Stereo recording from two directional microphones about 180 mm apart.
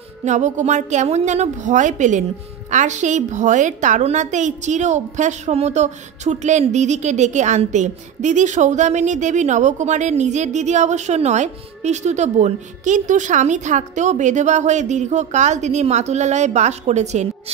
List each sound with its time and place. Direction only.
0.2 s a woman's voice: 40° right (ahead or behind)